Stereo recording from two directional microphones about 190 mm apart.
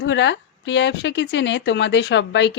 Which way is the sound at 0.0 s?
70° left (ahead or behind).